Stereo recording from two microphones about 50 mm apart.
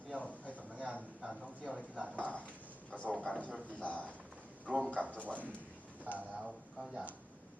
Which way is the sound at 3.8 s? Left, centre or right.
Left.